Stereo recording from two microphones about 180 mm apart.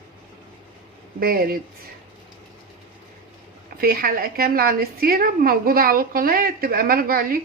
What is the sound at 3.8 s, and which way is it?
A woman's voice, 55° right (ahead or behind).